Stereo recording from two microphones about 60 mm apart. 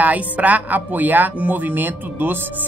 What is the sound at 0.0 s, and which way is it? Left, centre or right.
Speech, right.